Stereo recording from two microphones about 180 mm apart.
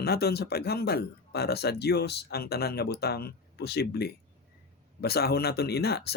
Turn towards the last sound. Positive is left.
turn(degrees=60)  # may be behind; listen again after turning